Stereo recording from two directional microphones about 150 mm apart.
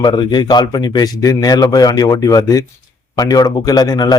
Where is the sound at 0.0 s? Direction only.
30° left (ahead or behind).